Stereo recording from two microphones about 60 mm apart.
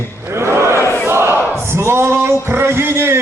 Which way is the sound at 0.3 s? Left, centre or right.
Right.